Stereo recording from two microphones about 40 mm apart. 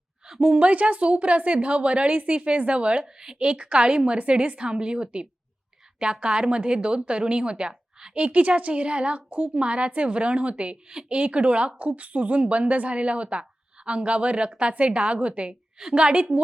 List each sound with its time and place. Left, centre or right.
0.3 s a woman's voice: right
3.0 s a woman's voice: centre
3.3 s a woman's voice: right
8.1 s a woman's voice: right